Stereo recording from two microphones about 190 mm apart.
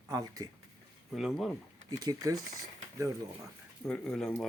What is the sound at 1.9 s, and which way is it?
Speech, 20° right (ahead or behind).